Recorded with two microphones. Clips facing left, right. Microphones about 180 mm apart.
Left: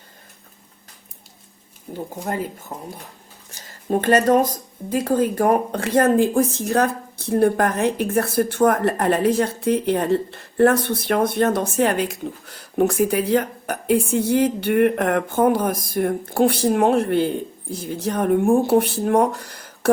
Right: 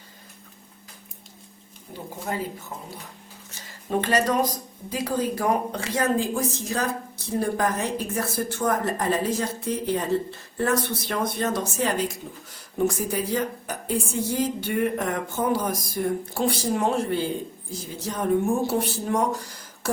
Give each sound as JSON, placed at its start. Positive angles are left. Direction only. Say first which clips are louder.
{"t": 1.9, "sound": "speech", "louder": "left 4 dB", "side_deg": 45}
{"t": 3.8, "sound": "speech", "louder": "left 6 dB", "side_deg": 50}